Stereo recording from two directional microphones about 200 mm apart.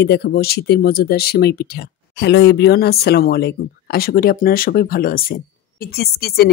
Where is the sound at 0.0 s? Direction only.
55° left (ahead or behind).